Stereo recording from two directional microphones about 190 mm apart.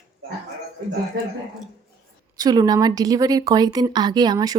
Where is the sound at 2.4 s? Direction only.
20° right (ahead or behind).